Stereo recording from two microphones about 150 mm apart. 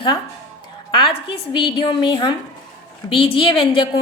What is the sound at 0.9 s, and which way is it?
A woman's voice, 35° left (ahead or behind).